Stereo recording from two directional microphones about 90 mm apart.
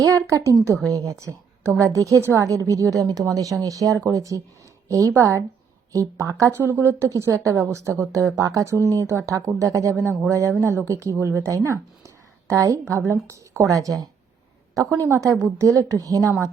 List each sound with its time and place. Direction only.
0.0 s a woman's voice: 35° right (ahead or behind)
6.7 s a woman's voice: 25° right (ahead or behind)
15.1 s speech: 35° right (ahead or behind)